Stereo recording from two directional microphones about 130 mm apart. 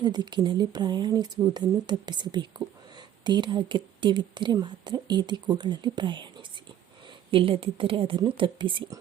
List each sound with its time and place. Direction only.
0.0 s speech: 35° right (ahead or behind)
7.3 s a woman's voice: 45° right (ahead or behind)